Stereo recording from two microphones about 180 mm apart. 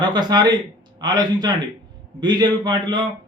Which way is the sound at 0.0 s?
25° right (ahead or behind).